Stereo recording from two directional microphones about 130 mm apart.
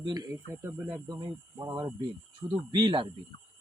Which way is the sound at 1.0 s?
30° right (ahead or behind).